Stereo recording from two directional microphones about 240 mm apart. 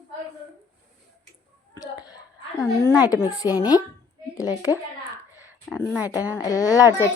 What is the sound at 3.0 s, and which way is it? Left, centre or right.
Speech, centre.